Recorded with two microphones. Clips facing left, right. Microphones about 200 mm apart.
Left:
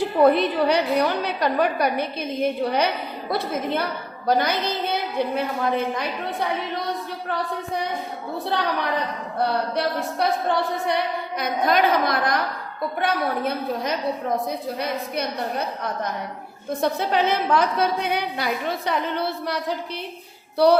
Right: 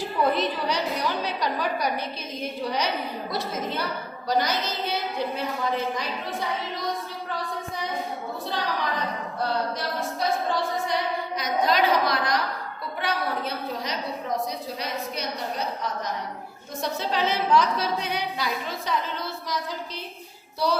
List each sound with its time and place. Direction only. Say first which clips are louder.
0.2 s a woman's voice: left 7 dB; 60° left (ahead or behind)
7.3 s a woman's voice: left 6 dB; 65° left (ahead or behind)